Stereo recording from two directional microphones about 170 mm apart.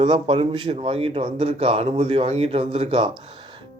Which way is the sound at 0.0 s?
30° right (ahead or behind).